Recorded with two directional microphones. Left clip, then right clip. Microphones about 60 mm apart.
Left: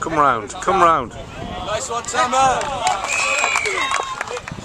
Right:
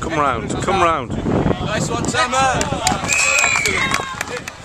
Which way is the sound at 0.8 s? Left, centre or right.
Centre.